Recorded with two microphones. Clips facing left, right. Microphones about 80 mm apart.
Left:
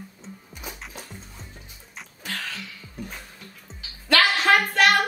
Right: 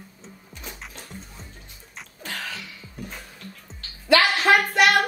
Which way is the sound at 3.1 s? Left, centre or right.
Centre.